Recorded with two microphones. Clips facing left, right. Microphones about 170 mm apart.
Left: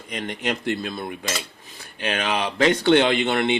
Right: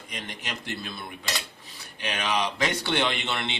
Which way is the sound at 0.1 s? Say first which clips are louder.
Left 10 dB; 55° left (ahead or behind).